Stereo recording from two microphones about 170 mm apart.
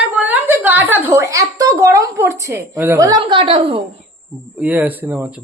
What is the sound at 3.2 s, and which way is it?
Speech, 30° right (ahead or behind).